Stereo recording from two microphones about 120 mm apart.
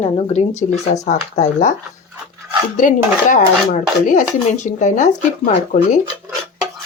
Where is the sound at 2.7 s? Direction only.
90° left.